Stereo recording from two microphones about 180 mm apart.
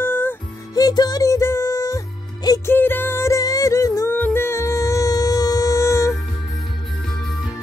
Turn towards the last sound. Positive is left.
turn(degrees=15)  # may be behind; listen again after turning